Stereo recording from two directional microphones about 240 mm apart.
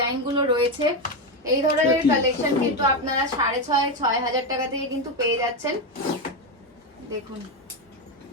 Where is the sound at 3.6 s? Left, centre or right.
Centre.